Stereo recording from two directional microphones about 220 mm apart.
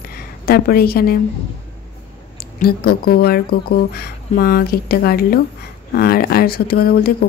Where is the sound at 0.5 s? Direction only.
45° left (ahead or behind).